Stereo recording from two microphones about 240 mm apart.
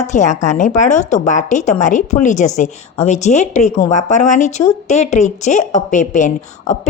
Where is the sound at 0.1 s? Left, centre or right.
Left.